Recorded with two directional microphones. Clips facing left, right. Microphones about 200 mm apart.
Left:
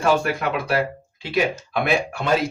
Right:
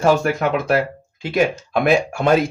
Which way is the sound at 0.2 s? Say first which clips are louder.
Right 4 dB; 45° right (ahead or behind).